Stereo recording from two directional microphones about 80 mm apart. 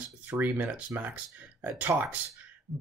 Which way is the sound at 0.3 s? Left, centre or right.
Right.